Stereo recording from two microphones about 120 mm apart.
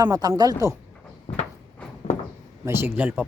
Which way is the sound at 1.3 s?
60° left (ahead or behind).